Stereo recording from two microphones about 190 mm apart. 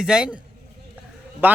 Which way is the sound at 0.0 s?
5° right (ahead or behind).